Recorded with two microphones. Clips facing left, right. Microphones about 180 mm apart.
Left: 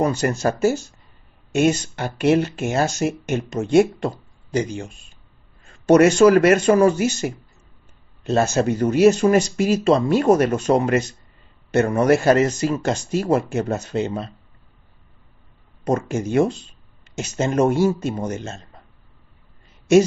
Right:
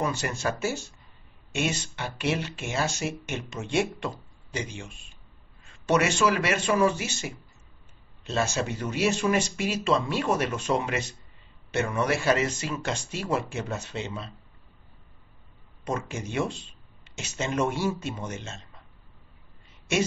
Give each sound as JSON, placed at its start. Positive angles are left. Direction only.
{"t": 0.0, "sound": "speech", "side_deg": 40}
{"t": 15.8, "sound": "speech", "side_deg": 40}